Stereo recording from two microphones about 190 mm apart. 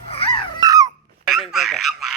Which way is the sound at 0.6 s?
20° right (ahead or behind).